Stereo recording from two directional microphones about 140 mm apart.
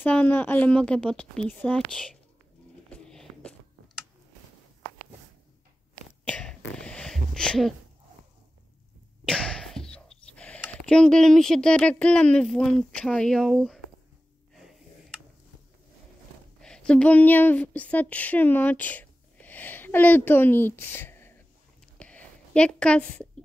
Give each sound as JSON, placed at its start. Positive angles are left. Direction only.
{"t": 0.0, "sound": "speech", "side_deg": 10}
{"t": 2.9, "sound": "biting", "side_deg": 5}
{"t": 6.2, "sound": "throat clearing", "side_deg": 5}
{"t": 9.2, "sound": "a sound", "side_deg": 5}
{"t": 10.7, "sound": "speech", "side_deg": 5}
{"t": 14.5, "sound": "snort", "side_deg": 0}
{"t": 16.5, "sound": "speech", "side_deg": 5}
{"t": 21.9, "sound": "a sound", "side_deg": 10}